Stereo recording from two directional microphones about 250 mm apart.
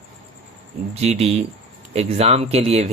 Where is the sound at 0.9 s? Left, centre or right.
Right.